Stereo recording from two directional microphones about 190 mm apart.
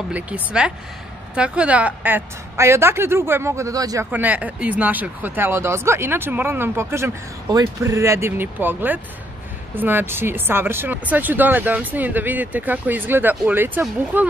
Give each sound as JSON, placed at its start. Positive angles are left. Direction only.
{"t": 0.1, "sound": "a woman's voice", "side_deg": -5}